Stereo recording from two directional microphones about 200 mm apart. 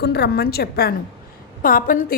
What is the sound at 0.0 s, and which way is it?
A woman's voice, 55° left (ahead or behind).